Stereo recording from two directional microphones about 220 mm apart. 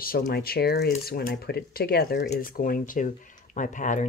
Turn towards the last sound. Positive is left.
turn(degrees=35)  # may be behind; listen again after turning